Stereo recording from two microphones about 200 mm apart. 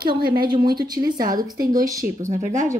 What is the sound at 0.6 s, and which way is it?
Speech, 20° right (ahead or behind).